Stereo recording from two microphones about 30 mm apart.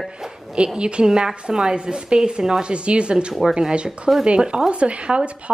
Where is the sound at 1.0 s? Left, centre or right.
Right.